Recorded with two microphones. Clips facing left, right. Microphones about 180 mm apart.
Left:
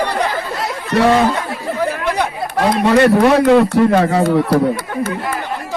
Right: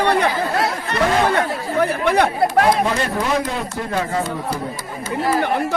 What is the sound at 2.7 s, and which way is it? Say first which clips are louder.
A man's voice: left 7 dB; 75° left (ahead or behind).